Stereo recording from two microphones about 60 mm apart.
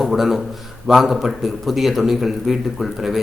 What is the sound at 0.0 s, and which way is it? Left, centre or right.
Speech, centre.